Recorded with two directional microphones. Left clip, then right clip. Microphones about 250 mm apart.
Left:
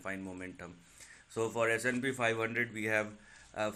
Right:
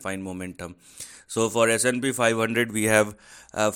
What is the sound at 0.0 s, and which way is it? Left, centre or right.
Speech, right.